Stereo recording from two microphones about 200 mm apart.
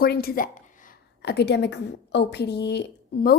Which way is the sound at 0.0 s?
50° left (ahead or behind).